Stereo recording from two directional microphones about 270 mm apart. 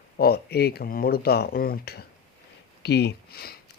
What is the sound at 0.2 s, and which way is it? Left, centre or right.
Speech, left.